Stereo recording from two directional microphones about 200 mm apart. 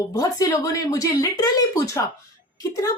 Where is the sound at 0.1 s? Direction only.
15° left (ahead or behind).